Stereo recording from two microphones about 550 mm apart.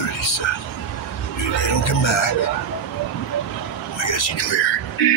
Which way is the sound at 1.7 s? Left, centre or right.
Left.